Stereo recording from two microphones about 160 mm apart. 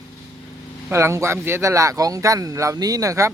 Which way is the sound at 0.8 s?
15° right (ahead or behind).